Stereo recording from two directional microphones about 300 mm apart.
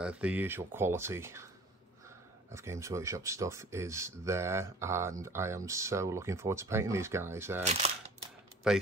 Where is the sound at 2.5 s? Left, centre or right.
Centre.